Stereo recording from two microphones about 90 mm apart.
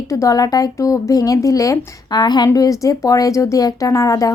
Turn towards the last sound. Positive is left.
turn(degrees=40)  # may be behind; listen again after turning